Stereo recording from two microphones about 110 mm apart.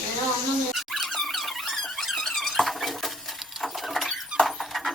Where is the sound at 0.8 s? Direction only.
Centre (ahead or behind).